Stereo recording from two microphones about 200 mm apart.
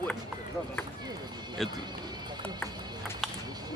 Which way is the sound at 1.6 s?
Centre (ahead or behind).